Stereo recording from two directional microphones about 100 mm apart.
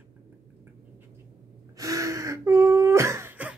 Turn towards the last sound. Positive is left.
turn(degrees=-30)  # may be behind; listen again after turning